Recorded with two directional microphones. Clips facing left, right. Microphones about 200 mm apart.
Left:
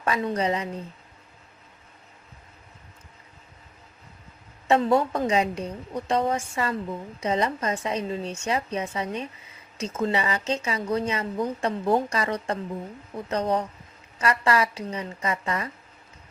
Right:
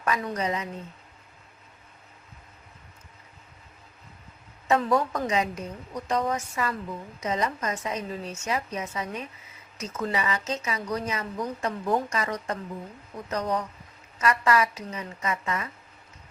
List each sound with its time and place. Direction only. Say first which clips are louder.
0.0 s a woman's voice: left 3 dB; 30° left (ahead or behind)
4.7 s a woman's voice: left 3 dB; 25° left (ahead or behind)